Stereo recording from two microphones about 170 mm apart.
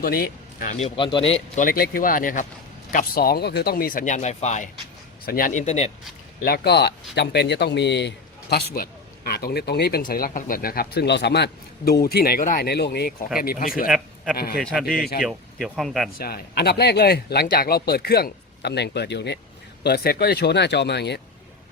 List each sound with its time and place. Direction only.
0.0 s speech: 60° left (ahead or behind); by 1.2 s 30° left (ahead or behind)
1.3 s speech: 50° left (ahead or behind)
5.2 s speech: 55° left (ahead or behind); by 5.9 s 40° left (ahead or behind)
6.4 s speech: 70° left (ahead or behind)
13.4 s speech: 60° left (ahead or behind)
13.8 s a man's voice: centre (ahead or behind)
14.3 s speech: 60° left (ahead or behind)
14.6 s speech: 5° left (ahead or behind)
16.1 s speech: 65° left (ahead or behind); by 19.4 s 90° left
19.8 s speech: 70° left (ahead or behind)